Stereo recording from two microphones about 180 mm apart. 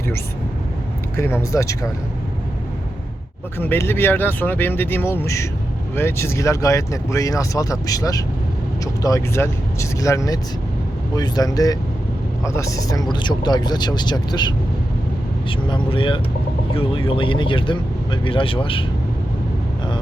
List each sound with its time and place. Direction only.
1.1 s speech: 15° left (ahead or behind)
3.6 s speech: 10° left (ahead or behind); by 18.9 s 30° left (ahead or behind)